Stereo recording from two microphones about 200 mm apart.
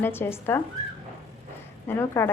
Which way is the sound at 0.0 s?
10° left (ahead or behind).